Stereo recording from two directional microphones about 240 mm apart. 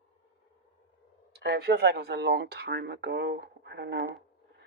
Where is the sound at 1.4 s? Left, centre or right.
Right.